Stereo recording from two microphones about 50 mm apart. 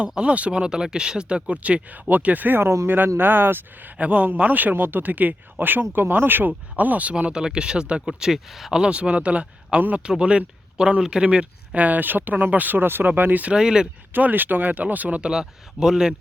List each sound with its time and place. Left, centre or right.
0.2 s speech: right
3.9 s speech: right
6.5 s speech: right; by 8.8 s centre
8.8 s speech: right
13.4 s speech: centre
14.1 s speech: right
15.3 s speech: centre